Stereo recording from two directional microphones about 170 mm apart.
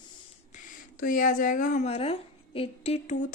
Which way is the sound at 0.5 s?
50° left (ahead or behind).